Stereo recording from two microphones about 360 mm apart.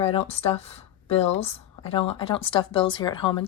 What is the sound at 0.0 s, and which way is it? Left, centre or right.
Speech, centre.